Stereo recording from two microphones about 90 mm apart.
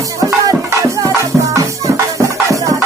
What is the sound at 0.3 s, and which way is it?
Music, 40° right (ahead or behind).